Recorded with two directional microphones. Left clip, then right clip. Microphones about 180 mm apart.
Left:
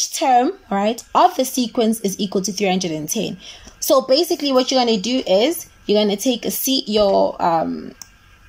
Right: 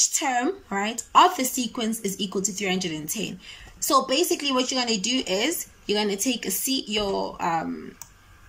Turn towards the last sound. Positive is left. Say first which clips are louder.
# left 9 dB
turn(degrees=30)  # may be behind; listen again after turning